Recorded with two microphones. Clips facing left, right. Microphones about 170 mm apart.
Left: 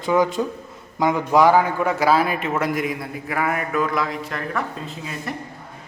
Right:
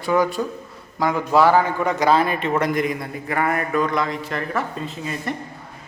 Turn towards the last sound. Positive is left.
turn(degrees=0)  # may be behind; listen again after turning